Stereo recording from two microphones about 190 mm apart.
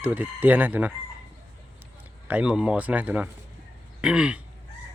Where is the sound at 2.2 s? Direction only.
5° right (ahead or behind).